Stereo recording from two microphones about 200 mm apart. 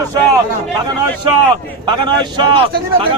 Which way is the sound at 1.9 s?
25° right (ahead or behind).